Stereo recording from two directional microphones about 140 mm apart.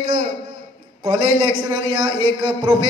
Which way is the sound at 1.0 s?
40° right (ahead or behind).